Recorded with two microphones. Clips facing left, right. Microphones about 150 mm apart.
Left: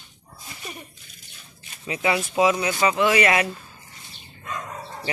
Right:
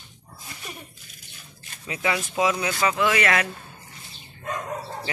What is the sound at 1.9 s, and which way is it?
A man's voice, 10° left (ahead or behind).